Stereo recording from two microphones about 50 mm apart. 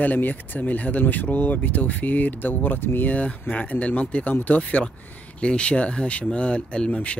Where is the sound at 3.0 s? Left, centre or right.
Left.